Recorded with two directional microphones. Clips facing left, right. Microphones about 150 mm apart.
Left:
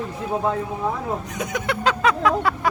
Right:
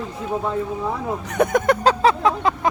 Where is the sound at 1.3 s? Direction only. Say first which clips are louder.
Right 8 dB; 55° right (ahead or behind); by 2.6 s 25° right (ahead or behind).